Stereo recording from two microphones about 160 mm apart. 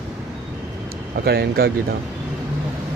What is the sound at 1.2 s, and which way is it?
Speech, 85° right.